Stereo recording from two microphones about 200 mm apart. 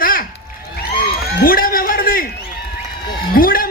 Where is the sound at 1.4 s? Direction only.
45° left (ahead or behind).